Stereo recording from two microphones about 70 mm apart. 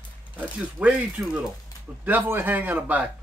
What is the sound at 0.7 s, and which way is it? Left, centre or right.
Speech, centre.